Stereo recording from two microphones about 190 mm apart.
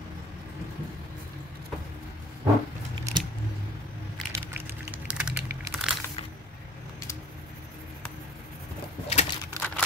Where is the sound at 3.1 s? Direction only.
25° right (ahead or behind).